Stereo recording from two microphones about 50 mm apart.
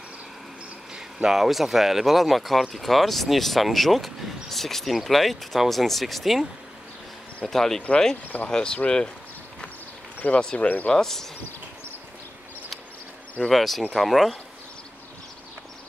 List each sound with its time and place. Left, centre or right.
0.9 s speech: centre
7.4 s speech: centre
10.2 s speech: left
10.9 s speech: centre
13.4 s speech: centre